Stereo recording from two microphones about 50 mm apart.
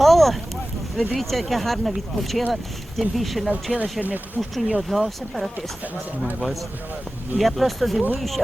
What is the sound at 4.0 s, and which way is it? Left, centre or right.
Speech, right.